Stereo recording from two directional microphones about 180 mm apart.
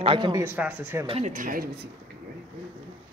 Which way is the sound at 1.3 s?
50° right (ahead or behind).